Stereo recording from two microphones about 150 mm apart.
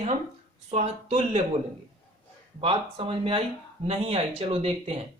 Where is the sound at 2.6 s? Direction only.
40° right (ahead or behind).